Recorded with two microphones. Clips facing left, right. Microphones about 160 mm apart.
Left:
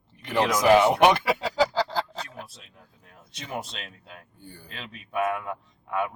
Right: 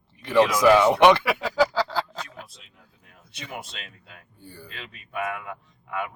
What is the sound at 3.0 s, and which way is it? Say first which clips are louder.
Speech: right 1 dB; 30° left (ahead or behind).